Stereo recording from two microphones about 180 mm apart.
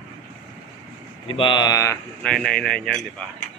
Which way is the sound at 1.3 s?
25° left (ahead or behind).